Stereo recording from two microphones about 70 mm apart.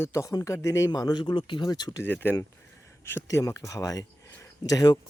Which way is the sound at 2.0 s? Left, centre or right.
Left.